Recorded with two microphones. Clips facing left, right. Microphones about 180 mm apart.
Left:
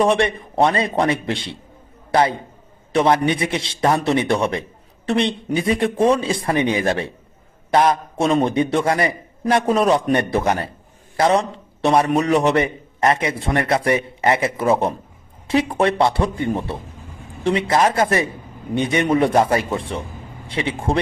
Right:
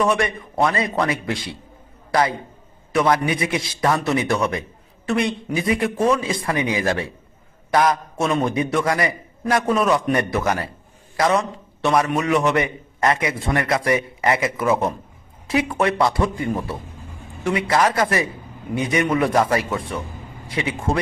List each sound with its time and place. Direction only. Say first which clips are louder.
0.0 s a man's voice: left 3 dB; 30° left (ahead or behind)